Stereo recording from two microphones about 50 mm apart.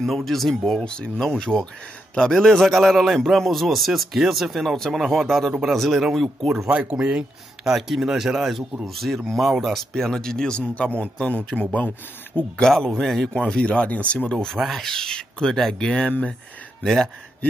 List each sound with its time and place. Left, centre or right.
0.0 s a man's voice: centre
0.8 s speech: centre
2.4 s a man's voice: centre
6.7 s a man's voice: centre
10.7 s speech: left
12.5 s speech: centre
13.3 s speech: centre
14.6 s speech: centre
16.1 s speech: left
16.8 s speech: centre